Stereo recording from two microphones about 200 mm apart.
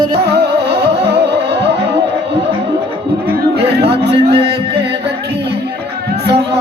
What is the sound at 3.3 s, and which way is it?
Music, 55° right (ahead or behind).